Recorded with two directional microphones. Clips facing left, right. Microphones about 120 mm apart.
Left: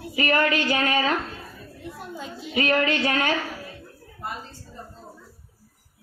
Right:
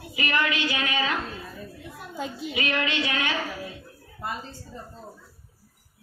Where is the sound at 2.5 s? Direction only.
40° left (ahead or behind).